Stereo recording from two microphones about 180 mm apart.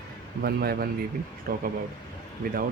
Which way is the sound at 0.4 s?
60° right (ahead or behind).